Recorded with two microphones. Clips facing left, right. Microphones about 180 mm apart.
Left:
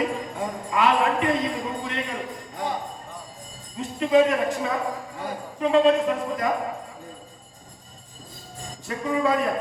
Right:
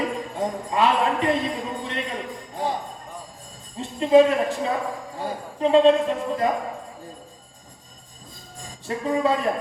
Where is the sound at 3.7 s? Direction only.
30° right (ahead or behind).